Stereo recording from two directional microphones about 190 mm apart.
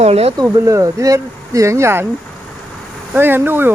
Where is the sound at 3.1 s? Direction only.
10° right (ahead or behind).